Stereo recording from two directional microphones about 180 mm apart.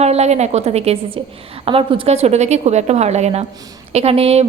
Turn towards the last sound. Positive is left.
turn(degrees=-35)  # may be behind; listen again after turning